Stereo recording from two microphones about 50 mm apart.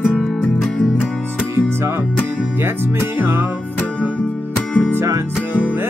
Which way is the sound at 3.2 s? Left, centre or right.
Right.